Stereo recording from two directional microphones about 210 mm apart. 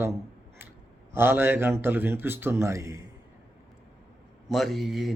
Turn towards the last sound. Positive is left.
turn(degrees=0)  # may be behind; listen again after turning